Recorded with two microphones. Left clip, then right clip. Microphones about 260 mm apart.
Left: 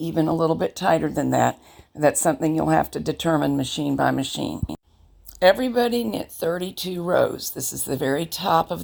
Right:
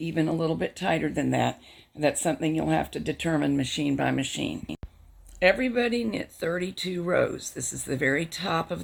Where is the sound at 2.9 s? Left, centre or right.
Left.